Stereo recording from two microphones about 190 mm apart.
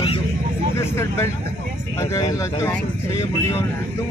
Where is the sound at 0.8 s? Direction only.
15° left (ahead or behind).